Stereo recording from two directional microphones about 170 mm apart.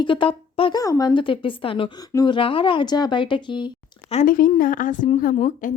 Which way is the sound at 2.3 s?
30° left (ahead or behind).